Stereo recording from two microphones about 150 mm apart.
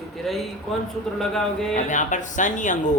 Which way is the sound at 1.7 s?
55° left (ahead or behind).